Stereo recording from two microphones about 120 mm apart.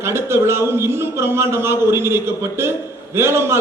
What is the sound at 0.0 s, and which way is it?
A man's voice, 20° right (ahead or behind).